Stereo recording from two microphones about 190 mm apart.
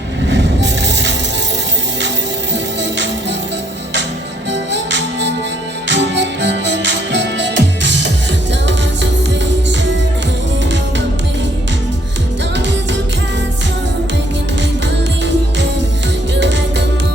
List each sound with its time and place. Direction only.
0.3 s music: 65° right (ahead or behind)
4.5 s music: 70° right (ahead or behind)
16.3 s music: 65° right (ahead or behind)